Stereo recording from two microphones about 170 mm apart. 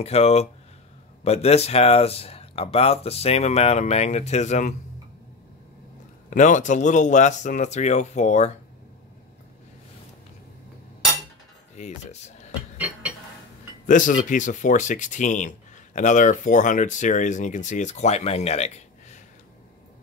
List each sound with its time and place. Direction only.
0.0 s speech: 40° left (ahead or behind)
6.3 s speech: 45° left (ahead or behind)
11.7 s speech: 40° left (ahead or behind)
12.7 s music: 10° right (ahead or behind)
13.8 s speech: 50° left (ahead or behind)